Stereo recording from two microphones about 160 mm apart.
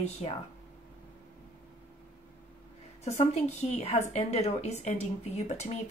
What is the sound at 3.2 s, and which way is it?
Speech, 45° left (ahead or behind).